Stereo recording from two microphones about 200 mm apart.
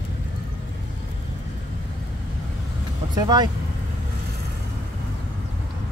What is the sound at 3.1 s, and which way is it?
Speech, 20° right (ahead or behind).